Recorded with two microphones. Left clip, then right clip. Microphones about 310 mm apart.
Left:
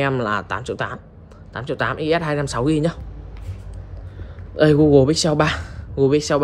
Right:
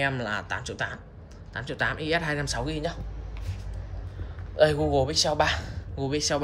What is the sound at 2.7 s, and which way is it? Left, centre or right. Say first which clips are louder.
Speech: left 11 dB; centre.